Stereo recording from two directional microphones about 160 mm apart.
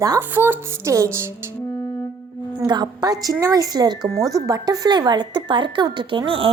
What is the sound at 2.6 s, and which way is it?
A woman's voice, 25° right (ahead or behind).